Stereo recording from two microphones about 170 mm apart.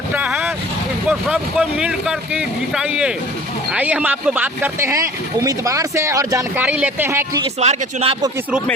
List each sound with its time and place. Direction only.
0.1 s vehicle: 10° right (ahead or behind)
1.3 s speech: 5° right (ahead or behind)
7.6 s speech: 40° right (ahead or behind)